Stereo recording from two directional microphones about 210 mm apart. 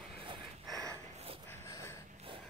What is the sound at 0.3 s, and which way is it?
Gasp, 15° right (ahead or behind).